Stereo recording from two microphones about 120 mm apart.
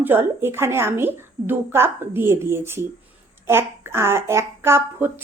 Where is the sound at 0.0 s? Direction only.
20° right (ahead or behind).